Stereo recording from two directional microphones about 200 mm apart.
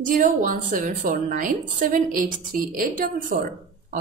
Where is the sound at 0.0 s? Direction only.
40° right (ahead or behind).